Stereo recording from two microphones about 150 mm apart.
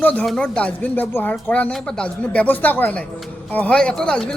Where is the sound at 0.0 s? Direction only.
10° left (ahead or behind).